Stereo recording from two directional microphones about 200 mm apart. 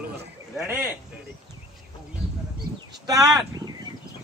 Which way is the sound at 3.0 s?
20° right (ahead or behind).